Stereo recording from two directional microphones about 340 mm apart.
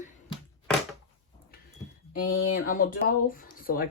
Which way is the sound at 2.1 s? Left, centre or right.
Left.